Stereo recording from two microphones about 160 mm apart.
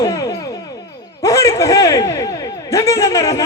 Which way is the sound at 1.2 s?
20° left (ahead or behind).